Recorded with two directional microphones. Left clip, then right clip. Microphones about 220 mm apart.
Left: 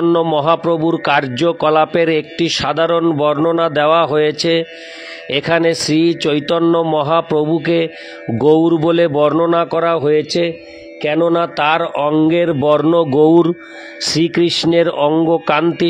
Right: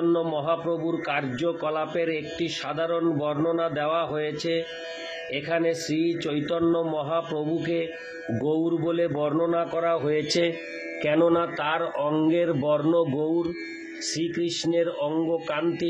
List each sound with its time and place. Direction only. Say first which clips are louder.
0.1 s a man's voice: left 11 dB; 45° left (ahead or behind)